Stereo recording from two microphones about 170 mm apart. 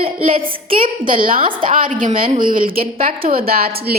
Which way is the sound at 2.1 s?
30° right (ahead or behind).